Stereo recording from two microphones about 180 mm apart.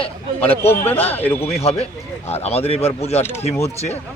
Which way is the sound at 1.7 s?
35° left (ahead or behind).